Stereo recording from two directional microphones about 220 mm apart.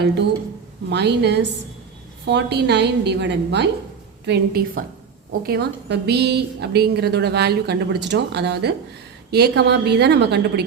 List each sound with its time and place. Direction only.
0.9 s a woman's voice: 50° right (ahead or behind)